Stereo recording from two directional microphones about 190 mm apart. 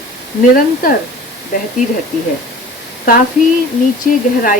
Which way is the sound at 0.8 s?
45° left (ahead or behind).